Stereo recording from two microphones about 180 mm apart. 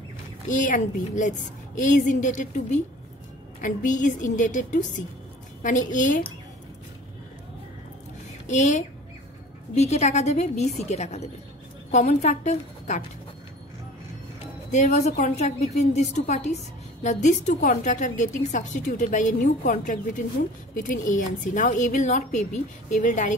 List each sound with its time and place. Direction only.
0.5 s a woman's voice: 45° left (ahead or behind)
8.5 s a woman's voice: 40° left (ahead or behind)
14.7 s a woman's voice: 40° left (ahead or behind)